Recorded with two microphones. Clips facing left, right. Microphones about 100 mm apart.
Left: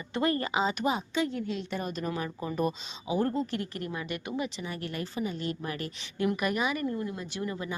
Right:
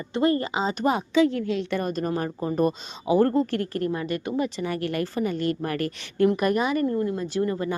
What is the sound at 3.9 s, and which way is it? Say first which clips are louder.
Speech: right 7 dB; 35° right (ahead or behind).